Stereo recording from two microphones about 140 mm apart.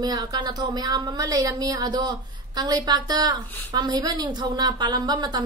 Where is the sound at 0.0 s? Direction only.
30° right (ahead or behind).